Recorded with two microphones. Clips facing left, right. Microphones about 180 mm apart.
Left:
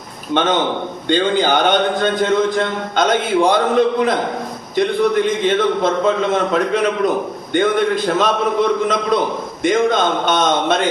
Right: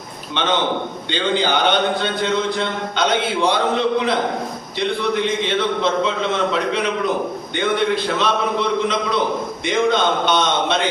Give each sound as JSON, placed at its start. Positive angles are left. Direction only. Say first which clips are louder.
{"t": 0.4, "sound": "speech", "louder": "left 3 dB", "side_deg": 45}